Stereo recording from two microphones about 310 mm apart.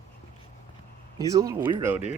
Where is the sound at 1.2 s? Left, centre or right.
Centre.